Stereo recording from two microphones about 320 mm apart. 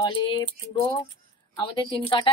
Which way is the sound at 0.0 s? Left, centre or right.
Centre.